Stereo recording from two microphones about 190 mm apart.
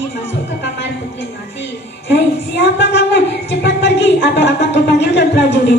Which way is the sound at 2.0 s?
65° left (ahead or behind).